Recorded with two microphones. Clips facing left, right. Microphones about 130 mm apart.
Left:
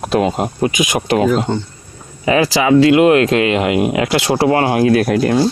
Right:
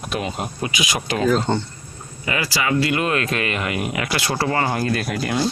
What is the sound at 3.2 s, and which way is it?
Speech, 90° left.